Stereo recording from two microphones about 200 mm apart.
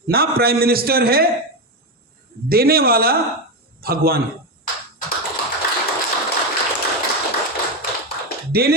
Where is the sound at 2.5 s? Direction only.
50° right (ahead or behind).